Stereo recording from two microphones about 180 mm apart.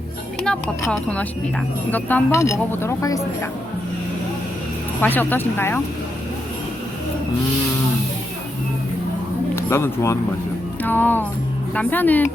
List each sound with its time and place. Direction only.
0.4 s speech: 5° left (ahead or behind)
4.9 s speech: 10° left (ahead or behind)
9.6 s speech: 15° left (ahead or behind)